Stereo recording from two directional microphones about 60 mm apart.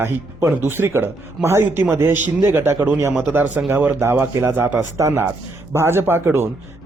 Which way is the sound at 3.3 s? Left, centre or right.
Right.